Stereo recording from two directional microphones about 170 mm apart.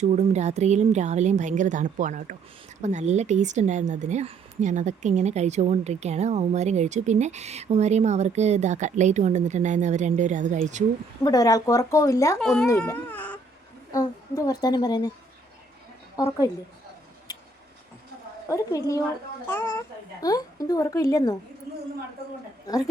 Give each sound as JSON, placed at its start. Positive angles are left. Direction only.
{"t": 0.0, "sound": "a woman's voice", "side_deg": -40}
{"t": 11.2, "sound": "speech", "side_deg": 20}
{"t": 12.4, "sound": "speech", "side_deg": 5}
{"t": 13.9, "sound": "speech", "side_deg": 20}
{"t": 16.1, "sound": "speech", "side_deg": 20}
{"t": 18.4, "sound": "a child's voice", "side_deg": 20}
{"t": 22.6, "sound": "a woman's voice", "side_deg": 20}